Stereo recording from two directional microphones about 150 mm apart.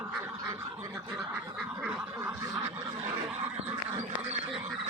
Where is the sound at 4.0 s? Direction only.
45° right (ahead or behind).